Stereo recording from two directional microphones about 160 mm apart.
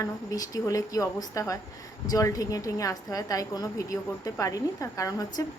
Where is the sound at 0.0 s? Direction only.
20° left (ahead or behind).